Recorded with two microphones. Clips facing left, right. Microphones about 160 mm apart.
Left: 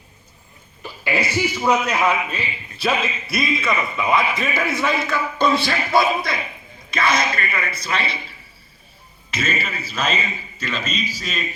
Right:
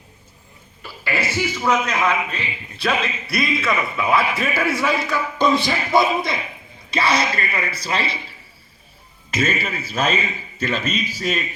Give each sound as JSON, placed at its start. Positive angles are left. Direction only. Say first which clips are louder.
{"t": 0.8, "sound": "a man's voice", "louder": "left 2 dB", "side_deg": 15}
{"t": 6.9, "sound": "speech", "louder": "right 1 dB", "side_deg": -35}
{"t": 9.3, "sound": "a man's voice", "louder": "right 3 dB", "side_deg": -50}